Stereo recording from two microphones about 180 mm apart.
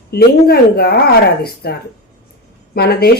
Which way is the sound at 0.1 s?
60° left (ahead or behind).